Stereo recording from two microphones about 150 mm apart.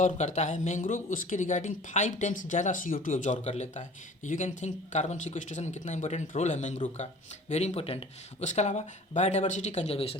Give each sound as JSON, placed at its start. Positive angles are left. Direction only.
{"t": 0.0, "sound": "speech", "side_deg": 55}